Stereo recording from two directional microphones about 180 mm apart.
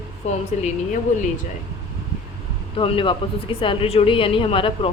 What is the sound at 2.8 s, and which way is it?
A woman's voice, 30° left (ahead or behind).